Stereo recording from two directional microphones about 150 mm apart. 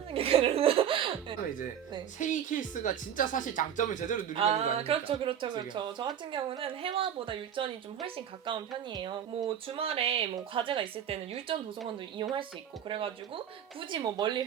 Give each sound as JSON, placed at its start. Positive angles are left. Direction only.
{"t": 0.1, "sound": "laughter", "side_deg": -40}
{"t": 2.1, "sound": "speech", "side_deg": 55}
{"t": 4.4, "sound": "speech", "side_deg": -45}